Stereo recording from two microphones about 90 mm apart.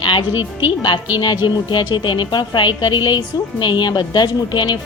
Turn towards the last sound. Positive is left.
turn(degrees=55)  # may be behind; listen again after turning